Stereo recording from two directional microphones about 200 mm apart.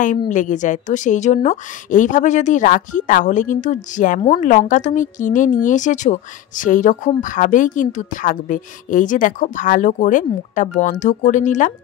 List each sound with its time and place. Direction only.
0.3 s speech: 40° left (ahead or behind)